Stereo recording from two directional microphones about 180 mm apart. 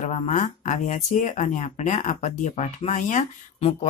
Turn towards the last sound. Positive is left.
turn(degrees=40)  # may be behind; listen again after turning